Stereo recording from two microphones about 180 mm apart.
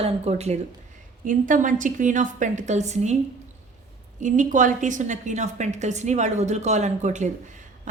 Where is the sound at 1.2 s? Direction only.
45° right (ahead or behind).